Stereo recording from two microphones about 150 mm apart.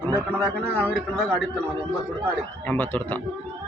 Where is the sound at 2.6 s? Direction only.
10° left (ahead or behind).